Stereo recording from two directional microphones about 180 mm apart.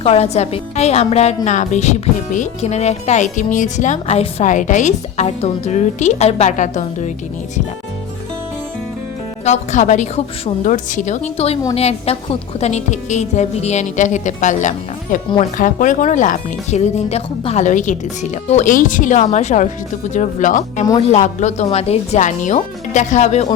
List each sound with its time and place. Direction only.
0.0 s speech: 35° left (ahead or behind)
9.4 s speech: 40° left (ahead or behind)